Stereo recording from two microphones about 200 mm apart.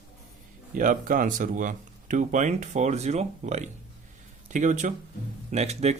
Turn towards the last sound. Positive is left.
turn(degrees=-35)  # may be behind; listen again after turning